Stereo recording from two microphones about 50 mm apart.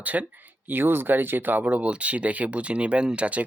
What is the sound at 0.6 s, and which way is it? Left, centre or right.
Speech, right.